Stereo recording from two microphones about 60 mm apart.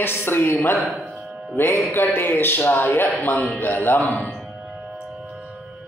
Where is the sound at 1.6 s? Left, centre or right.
Left.